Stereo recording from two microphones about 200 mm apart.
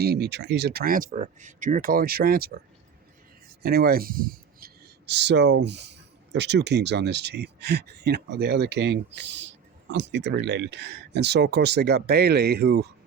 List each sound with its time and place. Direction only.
0.0 s speech: 55° right (ahead or behind)
3.6 s speech: 50° right (ahead or behind)